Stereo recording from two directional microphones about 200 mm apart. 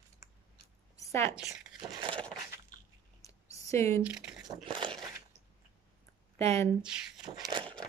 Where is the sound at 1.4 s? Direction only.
20° right (ahead or behind).